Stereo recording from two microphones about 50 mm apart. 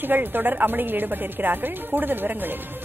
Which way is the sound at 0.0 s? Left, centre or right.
Right.